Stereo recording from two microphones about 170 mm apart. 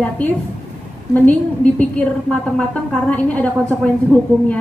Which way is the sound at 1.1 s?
10° left (ahead or behind).